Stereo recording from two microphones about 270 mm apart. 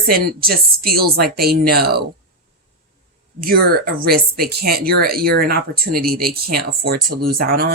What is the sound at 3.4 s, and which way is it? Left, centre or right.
Speech, right.